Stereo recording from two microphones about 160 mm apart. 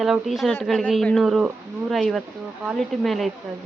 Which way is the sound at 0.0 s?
Centre (ahead or behind).